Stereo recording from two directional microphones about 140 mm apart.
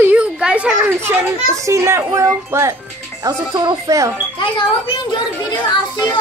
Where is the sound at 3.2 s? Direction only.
30° right (ahead or behind).